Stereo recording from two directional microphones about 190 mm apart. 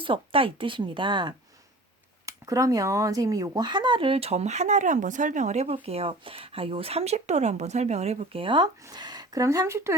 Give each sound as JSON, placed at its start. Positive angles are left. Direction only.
{"t": 0.0, "sound": "speech", "side_deg": -25}